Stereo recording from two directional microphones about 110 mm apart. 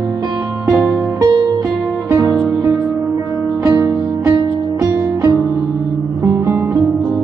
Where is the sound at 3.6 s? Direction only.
30° right (ahead or behind).